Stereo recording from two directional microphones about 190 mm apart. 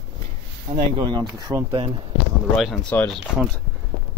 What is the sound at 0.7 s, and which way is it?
Speech, 25° right (ahead or behind).